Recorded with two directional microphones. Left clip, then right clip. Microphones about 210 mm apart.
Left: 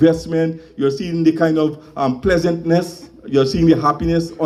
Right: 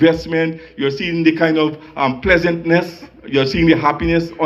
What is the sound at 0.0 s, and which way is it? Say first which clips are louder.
A man's voice: right 1 dB; 70° left (ahead or behind).